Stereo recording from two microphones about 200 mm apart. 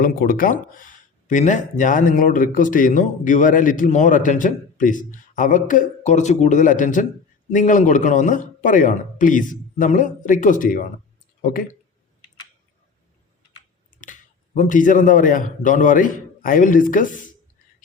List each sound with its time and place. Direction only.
0.0 s speech: 45° left (ahead or behind)
13.9 s speech: 40° left (ahead or behind)